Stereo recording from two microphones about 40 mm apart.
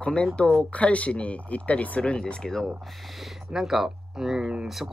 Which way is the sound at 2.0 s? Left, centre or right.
Left.